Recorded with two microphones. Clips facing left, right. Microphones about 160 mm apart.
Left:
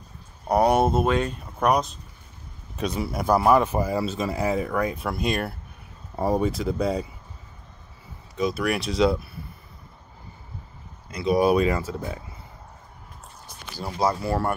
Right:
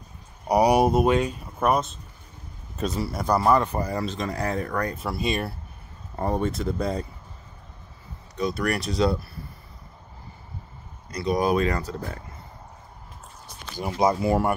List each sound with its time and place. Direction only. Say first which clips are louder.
0.5 s speech: right 1 dB; 10° right (ahead or behind)
8.4 s speech: left 1 dB; centre (ahead or behind)
11.2 s speech: left 3 dB; 5° left (ahead or behind)
14.0 s speech: right 3 dB; 15° right (ahead or behind)